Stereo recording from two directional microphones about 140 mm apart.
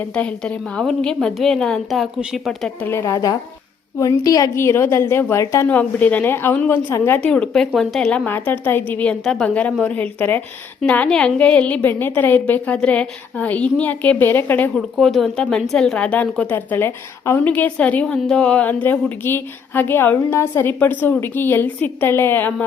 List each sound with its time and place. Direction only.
0.2 s a woman's voice: 5° left (ahead or behind)
2.8 s a woman's voice: 20° left (ahead or behind)
5.6 s a woman's voice: 10° left (ahead or behind)
7.3 s a woman's voice: 5° left (ahead or behind)
14.9 s a woman's voice: centre (ahead or behind)